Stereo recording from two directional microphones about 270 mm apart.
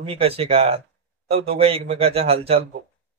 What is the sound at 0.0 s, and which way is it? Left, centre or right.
Speech, right.